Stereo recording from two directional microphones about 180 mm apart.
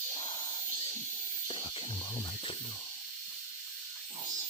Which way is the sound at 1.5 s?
30° left (ahead or behind).